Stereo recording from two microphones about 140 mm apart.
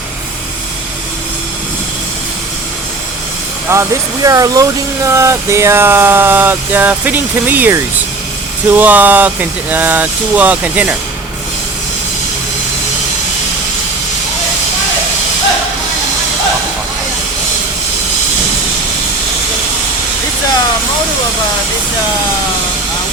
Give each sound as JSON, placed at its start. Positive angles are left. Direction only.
{"t": 3.7, "sound": "speech", "side_deg": -20}